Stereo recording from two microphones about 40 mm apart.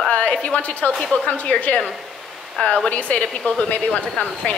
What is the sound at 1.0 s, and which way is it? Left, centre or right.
Speech, left.